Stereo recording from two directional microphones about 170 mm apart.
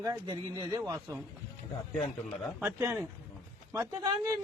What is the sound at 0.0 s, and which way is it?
Speech, 20° right (ahead or behind).